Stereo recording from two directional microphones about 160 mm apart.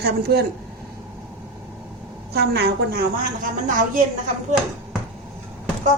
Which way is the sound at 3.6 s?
55° right (ahead or behind).